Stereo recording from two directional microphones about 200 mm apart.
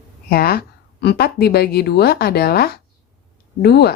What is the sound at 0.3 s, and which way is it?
Speech, 50° left (ahead or behind).